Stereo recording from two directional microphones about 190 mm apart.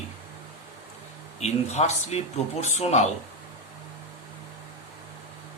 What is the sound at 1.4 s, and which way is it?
Speech, 35° left (ahead or behind).